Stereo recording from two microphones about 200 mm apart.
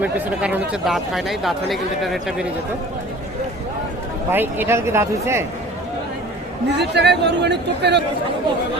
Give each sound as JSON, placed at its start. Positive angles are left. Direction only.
{"t": 0.0, "sound": "speech", "side_deg": -5}
{"t": 4.3, "sound": "speech", "side_deg": -10}
{"t": 6.7, "sound": "a man's voice", "side_deg": -60}